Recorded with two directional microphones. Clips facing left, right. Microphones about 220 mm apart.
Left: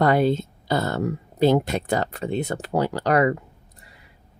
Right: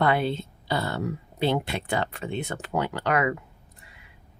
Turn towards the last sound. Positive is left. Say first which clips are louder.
# left 5 dB
turn(degrees=40)  # may be behind; listen again after turning